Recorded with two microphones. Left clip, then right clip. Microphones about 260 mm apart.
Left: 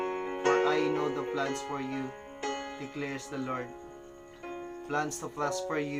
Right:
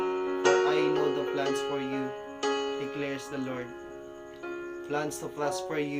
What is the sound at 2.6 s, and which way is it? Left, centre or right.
Music, right.